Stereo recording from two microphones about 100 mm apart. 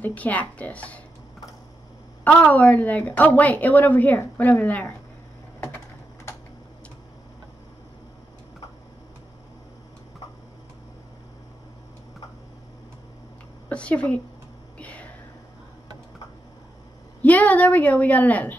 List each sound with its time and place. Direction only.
0.0 s a woman's voice: 15° left (ahead or behind)
2.2 s a woman's voice: 15° left (ahead or behind)
13.7 s speech: 10° left (ahead or behind)
14.8 s whispering: 15° left (ahead or behind)
17.2 s a woman's voice: 15° left (ahead or behind)